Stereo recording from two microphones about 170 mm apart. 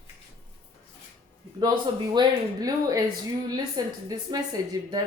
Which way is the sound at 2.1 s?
25° right (ahead or behind).